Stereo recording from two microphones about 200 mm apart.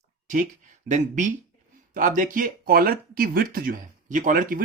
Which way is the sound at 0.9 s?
40° right (ahead or behind).